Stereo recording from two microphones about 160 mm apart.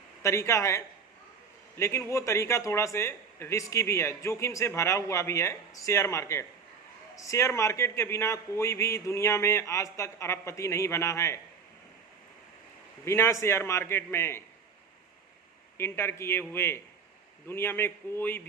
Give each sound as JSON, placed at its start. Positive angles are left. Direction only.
{"t": 0.2, "sound": "a man's voice", "side_deg": 20}
{"t": 1.8, "sound": "a man's voice", "side_deg": 15}
{"t": 13.1, "sound": "a man's voice", "side_deg": 15}
{"t": 15.8, "sound": "a man's voice", "side_deg": 15}